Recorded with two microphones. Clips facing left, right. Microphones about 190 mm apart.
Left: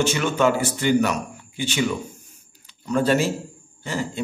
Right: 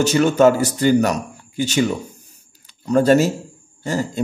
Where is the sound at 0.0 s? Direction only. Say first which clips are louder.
Right 6 dB; 40° right (ahead or behind).